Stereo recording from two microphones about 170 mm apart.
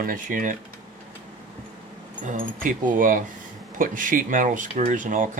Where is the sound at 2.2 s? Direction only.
50° right (ahead or behind).